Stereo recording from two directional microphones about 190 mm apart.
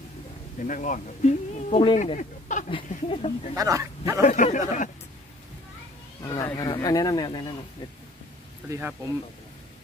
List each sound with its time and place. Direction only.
0.6 s speech: 45° left (ahead or behind)
2.1 s a sound: 40° left (ahead or behind)
2.9 s speech: 30° left (ahead or behind)
3.5 s speech: 15° right (ahead or behind)
4.2 s speech: 40° left (ahead or behind)
6.2 s speech: 20° left (ahead or behind)
8.6 s speech: 15° right (ahead or behind)